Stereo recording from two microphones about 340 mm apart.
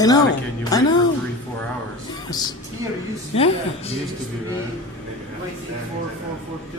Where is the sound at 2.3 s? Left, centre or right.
Centre.